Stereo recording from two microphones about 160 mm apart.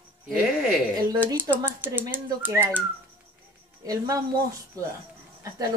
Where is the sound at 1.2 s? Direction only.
10° right (ahead or behind).